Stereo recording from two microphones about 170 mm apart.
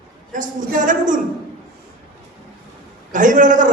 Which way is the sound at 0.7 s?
50° right (ahead or behind).